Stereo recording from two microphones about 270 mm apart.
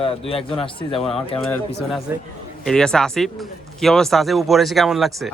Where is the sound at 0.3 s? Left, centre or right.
Centre.